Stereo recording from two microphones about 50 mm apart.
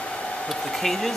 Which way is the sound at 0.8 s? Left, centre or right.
Centre.